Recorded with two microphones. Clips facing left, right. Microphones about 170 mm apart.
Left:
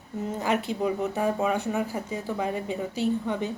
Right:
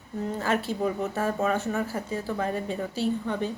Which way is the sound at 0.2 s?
15° left (ahead or behind).